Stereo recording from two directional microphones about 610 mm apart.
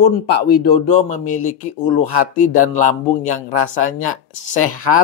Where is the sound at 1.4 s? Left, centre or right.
Left.